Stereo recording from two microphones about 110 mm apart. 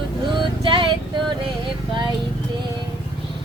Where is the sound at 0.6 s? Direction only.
50° right (ahead or behind).